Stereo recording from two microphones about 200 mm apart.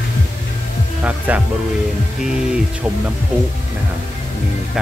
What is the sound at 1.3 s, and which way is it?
Speech, 5° right (ahead or behind).